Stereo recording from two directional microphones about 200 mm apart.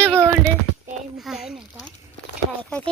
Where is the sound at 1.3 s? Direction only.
Centre (ahead or behind).